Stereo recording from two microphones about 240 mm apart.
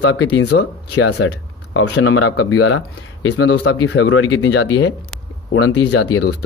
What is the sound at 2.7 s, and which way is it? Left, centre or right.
Speech, left.